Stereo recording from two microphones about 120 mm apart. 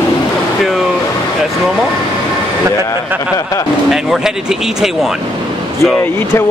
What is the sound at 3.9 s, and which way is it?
Speech, 5° right (ahead or behind).